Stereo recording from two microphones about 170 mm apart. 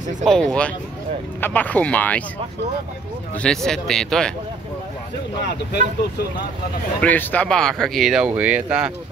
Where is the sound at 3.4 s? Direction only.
5° left (ahead or behind).